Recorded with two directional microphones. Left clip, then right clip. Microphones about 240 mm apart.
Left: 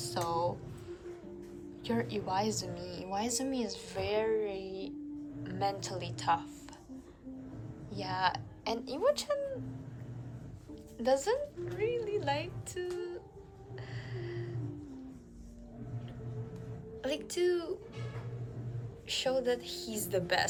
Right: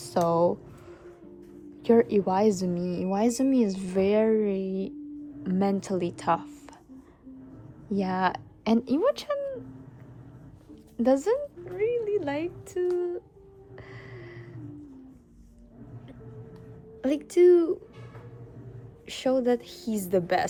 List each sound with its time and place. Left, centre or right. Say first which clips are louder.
0.0 s a sound: right 10 dB; right
1.8 s a woman's voice: right 14 dB; right
7.9 s a woman's voice: right 6 dB; right
10.9 s speech: right 6 dB; right
13.7 s gasp: right 1 dB; right
17.0 s a woman's voice: right 12 dB; right
19.0 s a woman's voice: right 6 dB; right